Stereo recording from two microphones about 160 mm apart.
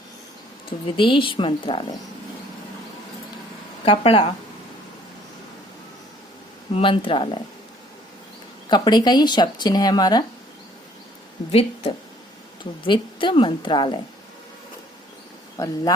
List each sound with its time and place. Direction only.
0.9 s a woman's voice: 30° left (ahead or behind)
3.8 s a woman's voice: 40° left (ahead or behind)
6.7 s a woman's voice: 35° left (ahead or behind)
8.7 s speech: 25° left (ahead or behind)
11.5 s a woman's voice: 35° left (ahead or behind)
15.5 s speech: 25° left (ahead or behind)